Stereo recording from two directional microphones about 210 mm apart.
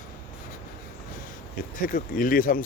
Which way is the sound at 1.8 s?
40° left (ahead or behind).